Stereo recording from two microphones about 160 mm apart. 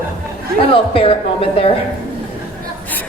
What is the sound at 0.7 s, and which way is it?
A woman's voice, 35° left (ahead or behind).